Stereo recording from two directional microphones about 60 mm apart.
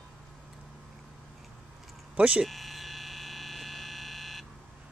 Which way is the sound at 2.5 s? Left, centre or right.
Centre.